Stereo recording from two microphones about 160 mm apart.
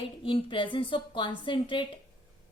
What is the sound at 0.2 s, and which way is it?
A woman's voice, 30° left (ahead or behind).